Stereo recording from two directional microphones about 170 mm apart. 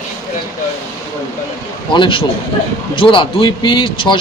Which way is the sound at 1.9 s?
30° left (ahead or behind).